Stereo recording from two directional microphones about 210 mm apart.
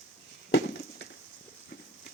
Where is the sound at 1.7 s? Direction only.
55° left (ahead or behind).